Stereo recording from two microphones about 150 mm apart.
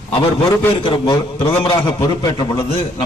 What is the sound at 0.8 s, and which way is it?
A man's voice, 35° left (ahead or behind).